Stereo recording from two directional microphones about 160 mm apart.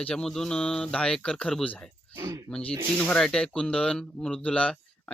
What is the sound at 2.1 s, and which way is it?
Speech, 20° right (ahead or behind).